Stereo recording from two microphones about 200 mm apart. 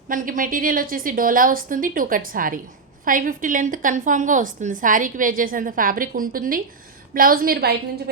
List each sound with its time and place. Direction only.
0.1 s a woman's voice: 40° right (ahead or behind)